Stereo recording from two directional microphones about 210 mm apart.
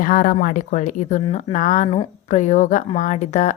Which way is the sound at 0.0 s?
40° left (ahead or behind).